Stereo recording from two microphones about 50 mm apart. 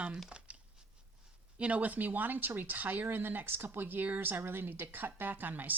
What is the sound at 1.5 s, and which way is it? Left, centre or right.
Speech, right.